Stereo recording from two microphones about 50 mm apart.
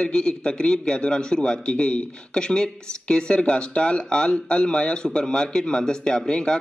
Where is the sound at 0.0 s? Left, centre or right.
Centre.